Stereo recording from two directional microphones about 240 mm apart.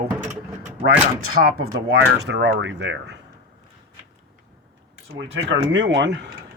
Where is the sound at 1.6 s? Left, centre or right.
Right.